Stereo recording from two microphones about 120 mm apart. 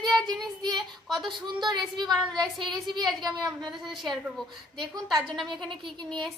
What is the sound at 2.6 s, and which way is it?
Speech, centre (ahead or behind).